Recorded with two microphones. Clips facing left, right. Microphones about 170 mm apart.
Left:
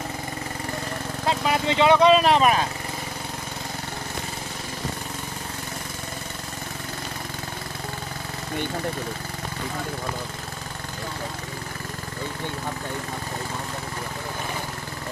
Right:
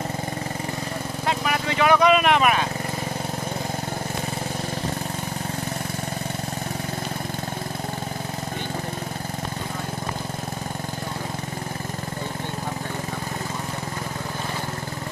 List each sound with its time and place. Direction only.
1.4 s speech: 25° left (ahead or behind)